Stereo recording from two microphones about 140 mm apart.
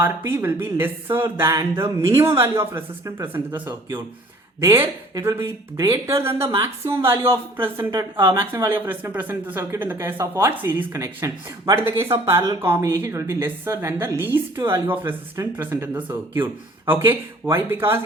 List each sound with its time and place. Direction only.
0.0 s a woman's voice: 20° right (ahead or behind)